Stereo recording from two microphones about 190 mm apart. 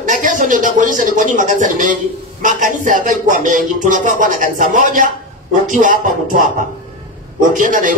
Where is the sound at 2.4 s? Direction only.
45° right (ahead or behind).